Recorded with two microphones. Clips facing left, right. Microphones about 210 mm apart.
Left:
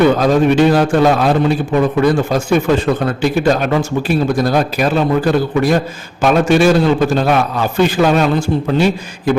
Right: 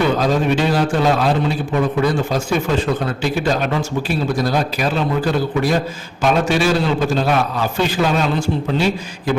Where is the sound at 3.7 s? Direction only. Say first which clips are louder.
Left 5 dB; 55° left (ahead or behind).